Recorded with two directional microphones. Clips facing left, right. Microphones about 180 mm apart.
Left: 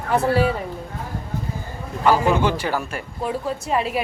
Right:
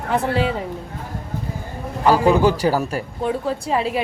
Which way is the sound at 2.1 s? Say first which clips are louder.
Right 3 dB; 40° right (ahead or behind).